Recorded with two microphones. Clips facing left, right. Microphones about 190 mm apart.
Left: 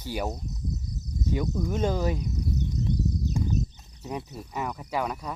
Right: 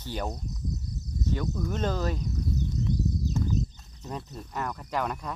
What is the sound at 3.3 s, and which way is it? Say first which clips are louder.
Clip-clop: even; 10° left (ahead or behind).